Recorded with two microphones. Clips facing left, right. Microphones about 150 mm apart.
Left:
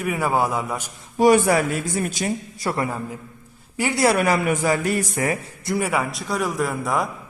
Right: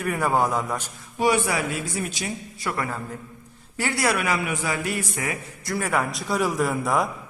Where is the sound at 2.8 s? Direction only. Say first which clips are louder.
Left 4 dB; 15° left (ahead or behind).